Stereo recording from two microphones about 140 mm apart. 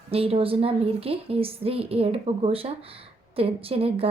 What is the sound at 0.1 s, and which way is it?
A woman's voice, 45° right (ahead or behind).